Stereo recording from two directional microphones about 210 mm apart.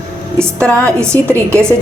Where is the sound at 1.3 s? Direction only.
10° right (ahead or behind).